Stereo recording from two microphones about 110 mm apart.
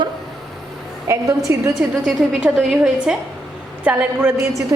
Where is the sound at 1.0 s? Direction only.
30° right (ahead or behind).